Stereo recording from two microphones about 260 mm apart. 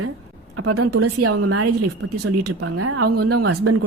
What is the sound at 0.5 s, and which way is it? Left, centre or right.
A woman's voice, right.